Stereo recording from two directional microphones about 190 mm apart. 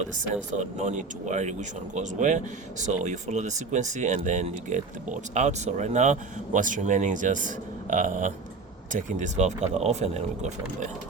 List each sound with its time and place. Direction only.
0.1 s speech: 40° right (ahead or behind)